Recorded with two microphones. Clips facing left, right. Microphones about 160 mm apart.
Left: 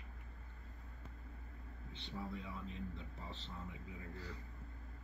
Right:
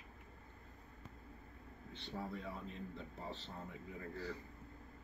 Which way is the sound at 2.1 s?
45° right (ahead or behind).